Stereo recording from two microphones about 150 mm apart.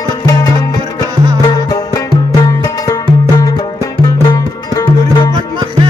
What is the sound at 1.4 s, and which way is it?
Music, 25° left (ahead or behind).